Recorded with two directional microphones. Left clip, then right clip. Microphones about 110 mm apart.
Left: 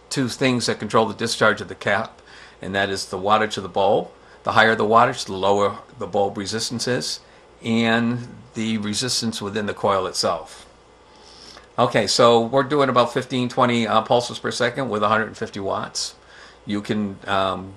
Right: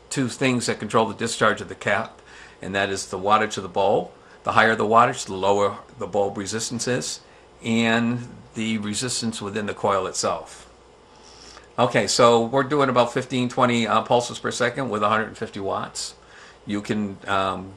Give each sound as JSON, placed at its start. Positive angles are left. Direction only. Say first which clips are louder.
{"t": 0.1, "sound": "speech", "louder": "left 2 dB", "side_deg": 35}
{"t": 11.7, "sound": "speech", "louder": "left 2 dB", "side_deg": 35}
{"t": 16.6, "sound": "speech", "louder": "left 2 dB", "side_deg": 35}